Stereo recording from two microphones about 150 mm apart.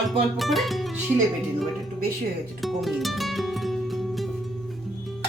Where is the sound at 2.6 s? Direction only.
Centre (ahead or behind).